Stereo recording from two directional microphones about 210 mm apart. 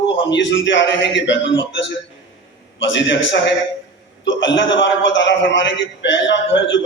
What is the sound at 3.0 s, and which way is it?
A man's voice, 55° left (ahead or behind).